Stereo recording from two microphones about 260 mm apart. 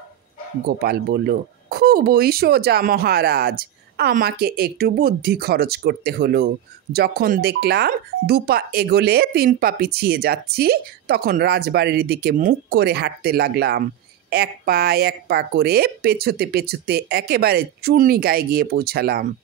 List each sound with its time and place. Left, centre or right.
0.7 s speech: right